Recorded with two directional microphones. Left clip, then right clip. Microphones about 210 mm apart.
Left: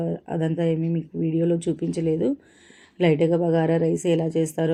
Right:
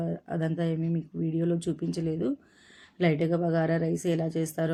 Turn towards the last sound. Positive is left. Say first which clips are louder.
# left 6 dB
turn(degrees=5)  # may be behind; listen again after turning